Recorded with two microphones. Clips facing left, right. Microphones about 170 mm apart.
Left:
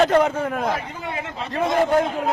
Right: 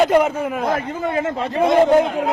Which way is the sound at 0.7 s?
50° right (ahead or behind).